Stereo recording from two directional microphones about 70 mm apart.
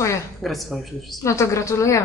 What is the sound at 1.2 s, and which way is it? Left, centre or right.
Speech, left.